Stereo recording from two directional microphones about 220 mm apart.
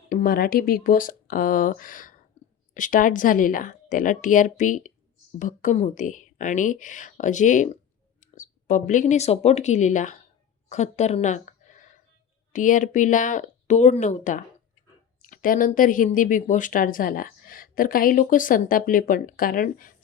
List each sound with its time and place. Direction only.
0.1 s speech: 40° left (ahead or behind)